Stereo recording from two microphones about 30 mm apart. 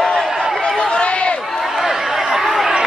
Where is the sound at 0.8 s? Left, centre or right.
Left.